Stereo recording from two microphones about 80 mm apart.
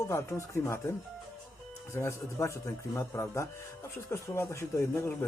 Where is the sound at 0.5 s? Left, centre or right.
Left.